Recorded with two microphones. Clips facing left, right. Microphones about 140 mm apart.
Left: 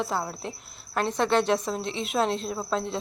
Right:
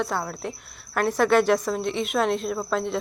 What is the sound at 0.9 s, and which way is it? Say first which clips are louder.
Speech: right 4 dB; 25° left (ahead or behind).